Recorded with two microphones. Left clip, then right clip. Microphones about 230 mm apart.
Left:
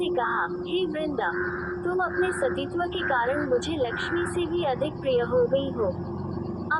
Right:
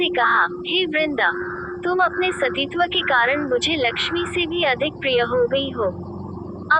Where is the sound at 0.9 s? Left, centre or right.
Right.